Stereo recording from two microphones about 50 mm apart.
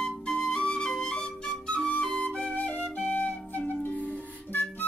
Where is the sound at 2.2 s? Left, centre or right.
Left.